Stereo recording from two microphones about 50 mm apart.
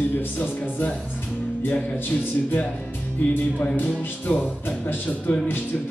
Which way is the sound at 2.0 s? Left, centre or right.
Left.